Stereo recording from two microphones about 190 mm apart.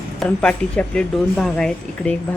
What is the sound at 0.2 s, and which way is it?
Speech, 5° left (ahead or behind).